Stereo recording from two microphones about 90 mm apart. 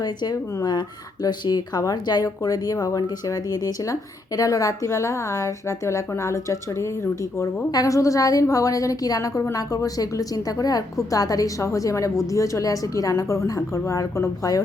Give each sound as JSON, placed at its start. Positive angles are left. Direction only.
{"t": 0.0, "sound": "a woman's voice", "side_deg": 50}
{"t": 7.7, "sound": "a woman's voice", "side_deg": 40}